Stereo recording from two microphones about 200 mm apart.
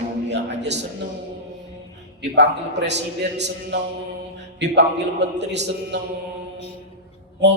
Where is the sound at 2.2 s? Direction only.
60° right (ahead or behind).